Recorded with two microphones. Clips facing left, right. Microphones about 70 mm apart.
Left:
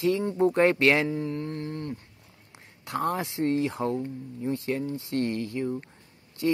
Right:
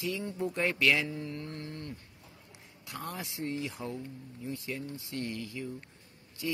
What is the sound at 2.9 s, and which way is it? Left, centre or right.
Speech, left.